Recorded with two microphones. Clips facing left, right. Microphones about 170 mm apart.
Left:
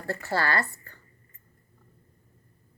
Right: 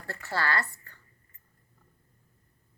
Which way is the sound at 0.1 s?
40° left (ahead or behind).